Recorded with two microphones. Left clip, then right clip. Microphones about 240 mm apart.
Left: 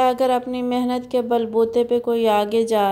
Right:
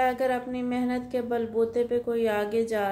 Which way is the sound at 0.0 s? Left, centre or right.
Left.